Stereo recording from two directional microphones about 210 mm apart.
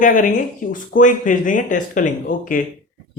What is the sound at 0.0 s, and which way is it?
A man's voice, 40° left (ahead or behind).